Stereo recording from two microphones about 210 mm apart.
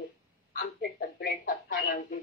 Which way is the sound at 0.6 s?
45° left (ahead or behind).